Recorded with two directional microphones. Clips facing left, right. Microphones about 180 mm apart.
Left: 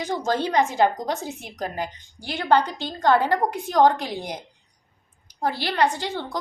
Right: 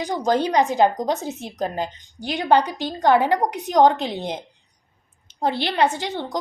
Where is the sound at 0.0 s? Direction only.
15° right (ahead or behind).